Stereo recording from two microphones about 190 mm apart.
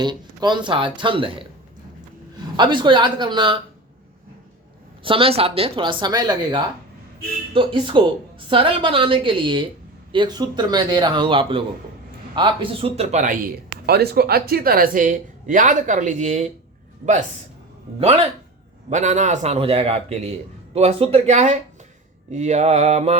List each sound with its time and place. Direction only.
0.0 s a woman's voice: 20° right (ahead or behind)
2.6 s a woman's voice: 25° right (ahead or behind)
5.0 s a woman's voice: 30° right (ahead or behind); by 13.5 s 45° right (ahead or behind)
13.8 s a woman's voice: 55° right (ahead or behind); by 16.5 s 40° right (ahead or behind)
18.0 s a man's voice: 30° right (ahead or behind)